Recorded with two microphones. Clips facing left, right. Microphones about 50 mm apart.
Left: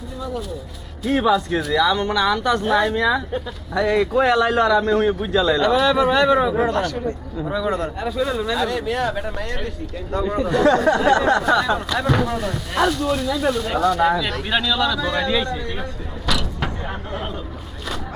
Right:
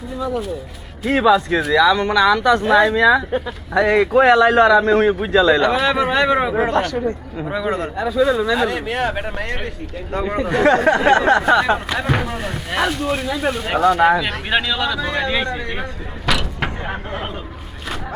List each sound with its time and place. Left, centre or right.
0.2 s speech: right
1.0 s speech: right
1.7 s speech: right
2.0 s a woman's voice: right
2.9 s speech: right
3.3 s speech: right
5.7 s speech: right
6.6 s a woman's voice: right
8.5 s speech: right
11.9 s speech: right
16.2 s vehicle: right